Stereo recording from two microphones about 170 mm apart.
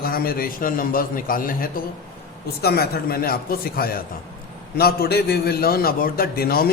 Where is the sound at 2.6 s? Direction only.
65° left (ahead or behind).